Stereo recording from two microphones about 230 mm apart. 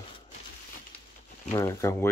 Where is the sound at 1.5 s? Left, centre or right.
Centre.